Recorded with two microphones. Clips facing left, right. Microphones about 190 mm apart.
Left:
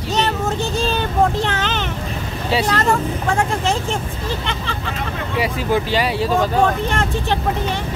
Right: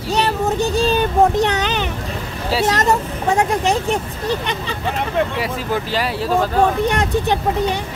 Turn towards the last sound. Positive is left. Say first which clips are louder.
# right 3 dB
turn(degrees=-15)  # may be behind; listen again after turning